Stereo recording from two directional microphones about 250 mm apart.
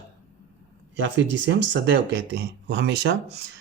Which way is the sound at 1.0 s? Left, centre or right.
Right.